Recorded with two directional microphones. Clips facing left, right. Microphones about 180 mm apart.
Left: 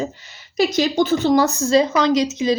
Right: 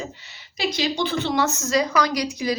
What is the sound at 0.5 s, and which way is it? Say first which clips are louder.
A woman's voice: left 7 dB; 45° left (ahead or behind).